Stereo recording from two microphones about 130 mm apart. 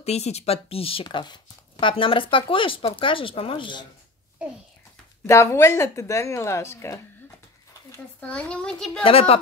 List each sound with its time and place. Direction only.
0.0 s speech: 55° left (ahead or behind)
5.2 s speech: 20° left (ahead or behind); by 9.0 s 5° left (ahead or behind)
9.0 s speech: 50° left (ahead or behind)